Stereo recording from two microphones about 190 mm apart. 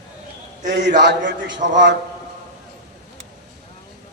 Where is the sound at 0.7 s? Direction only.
65° right (ahead or behind).